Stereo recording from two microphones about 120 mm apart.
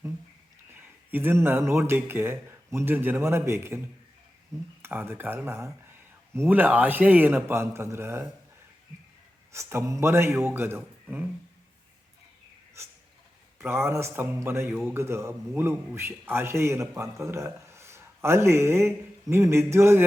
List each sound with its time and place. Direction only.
0.7 s speech: 15° right (ahead or behind)
4.8 s speech: 20° right (ahead or behind)
9.5 s speech: 20° right (ahead or behind)
13.6 s speech: 20° right (ahead or behind)